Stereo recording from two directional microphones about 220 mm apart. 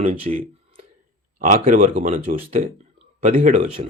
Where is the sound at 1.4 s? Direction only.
35° right (ahead or behind).